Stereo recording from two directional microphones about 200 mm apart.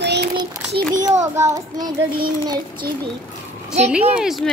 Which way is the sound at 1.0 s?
15° right (ahead or behind).